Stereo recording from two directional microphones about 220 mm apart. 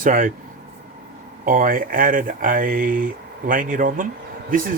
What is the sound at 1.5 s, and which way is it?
Speech, 40° right (ahead or behind).